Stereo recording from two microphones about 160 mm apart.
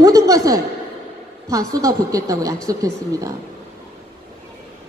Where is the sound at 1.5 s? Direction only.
20° right (ahead or behind).